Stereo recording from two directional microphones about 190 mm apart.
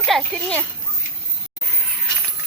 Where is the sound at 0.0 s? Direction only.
5° left (ahead or behind).